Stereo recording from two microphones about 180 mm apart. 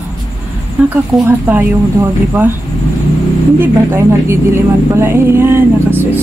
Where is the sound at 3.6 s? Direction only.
15° right (ahead or behind).